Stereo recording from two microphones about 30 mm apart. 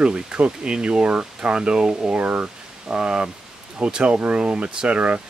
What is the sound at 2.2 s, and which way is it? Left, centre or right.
Speech, right.